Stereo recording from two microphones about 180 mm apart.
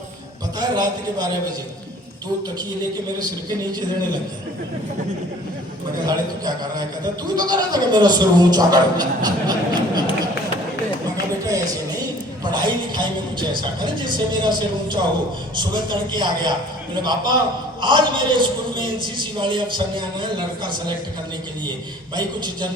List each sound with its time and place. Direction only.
0.6 s a man's voice: 20° right (ahead or behind)
6.1 s a man's voice: 20° right (ahead or behind)
12.5 s a man's voice: 25° right (ahead or behind)
22.1 s a man's voice: 25° right (ahead or behind)